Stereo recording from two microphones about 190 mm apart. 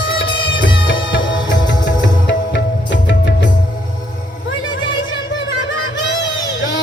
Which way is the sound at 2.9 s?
70° left (ahead or behind).